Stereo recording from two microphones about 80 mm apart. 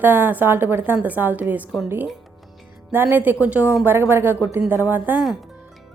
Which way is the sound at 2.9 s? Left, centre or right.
Right.